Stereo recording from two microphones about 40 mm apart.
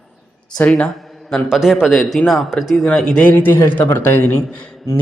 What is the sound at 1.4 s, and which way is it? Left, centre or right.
Speech, centre.